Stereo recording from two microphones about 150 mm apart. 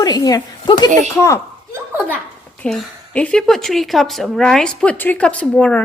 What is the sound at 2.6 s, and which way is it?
A woman's voice, 5° left (ahead or behind).